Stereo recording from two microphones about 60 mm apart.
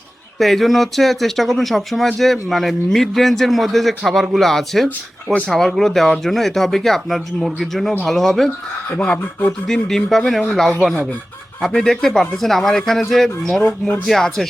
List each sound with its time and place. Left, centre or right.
0.3 s a man's voice: centre
9.0 s speech: left
9.5 s a man's voice: centre